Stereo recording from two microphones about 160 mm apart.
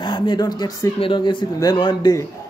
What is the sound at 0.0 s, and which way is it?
A man's voice, 30° left (ahead or behind).